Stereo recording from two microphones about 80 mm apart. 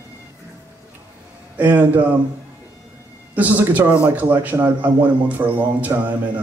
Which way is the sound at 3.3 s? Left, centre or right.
Right.